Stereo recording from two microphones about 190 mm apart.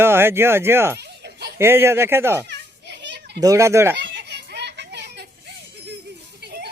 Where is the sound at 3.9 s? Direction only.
65° right (ahead or behind).